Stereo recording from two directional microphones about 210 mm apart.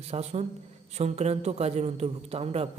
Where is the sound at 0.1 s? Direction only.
30° right (ahead or behind).